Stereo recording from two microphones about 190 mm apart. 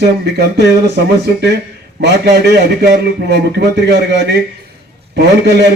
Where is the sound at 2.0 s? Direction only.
60° right (ahead or behind).